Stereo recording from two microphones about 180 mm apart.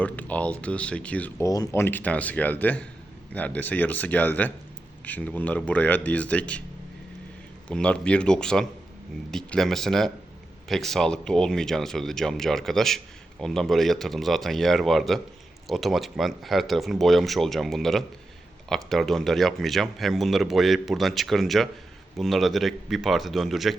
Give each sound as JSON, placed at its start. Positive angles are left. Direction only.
{"t": 0.0, "sound": "speech", "side_deg": 10}
{"t": 7.7, "sound": "speech", "side_deg": 5}